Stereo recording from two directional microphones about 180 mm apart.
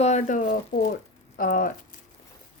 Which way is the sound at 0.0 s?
40° left (ahead or behind).